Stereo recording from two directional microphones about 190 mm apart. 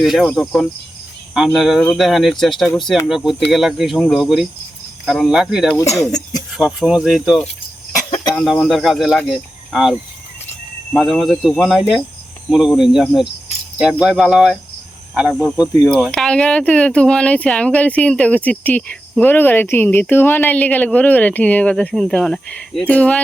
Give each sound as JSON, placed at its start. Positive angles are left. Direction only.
{"t": 0.0, "sound": "speech", "side_deg": 0}
{"t": 5.7, "sound": "speech", "side_deg": 15}
{"t": 6.6, "sound": "speech", "side_deg": 0}
{"t": 10.9, "sound": "speech", "side_deg": 0}
{"t": 15.8, "sound": "speech", "side_deg": -5}